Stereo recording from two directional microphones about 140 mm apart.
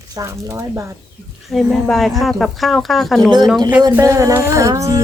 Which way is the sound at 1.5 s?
Centre (ahead or behind).